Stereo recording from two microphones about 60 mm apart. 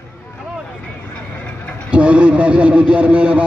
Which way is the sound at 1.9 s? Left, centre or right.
Centre.